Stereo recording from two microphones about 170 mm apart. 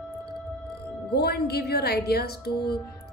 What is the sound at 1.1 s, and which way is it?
Speech, 70° left (ahead or behind).